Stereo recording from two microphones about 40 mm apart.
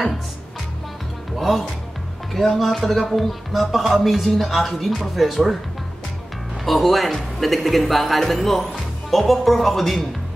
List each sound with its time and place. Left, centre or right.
1.3 s music: centre
2.3 s speech: centre
6.6 s speech: centre